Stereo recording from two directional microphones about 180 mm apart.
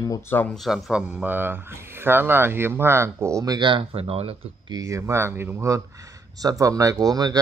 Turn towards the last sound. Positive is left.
turn(degrees=-20)  # may be behind; listen again after turning